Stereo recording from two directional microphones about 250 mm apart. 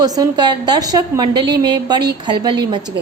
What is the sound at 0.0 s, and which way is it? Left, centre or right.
A woman's voice, centre.